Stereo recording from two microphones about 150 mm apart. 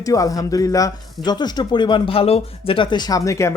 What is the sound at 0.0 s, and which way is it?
Speech, 20° left (ahead or behind).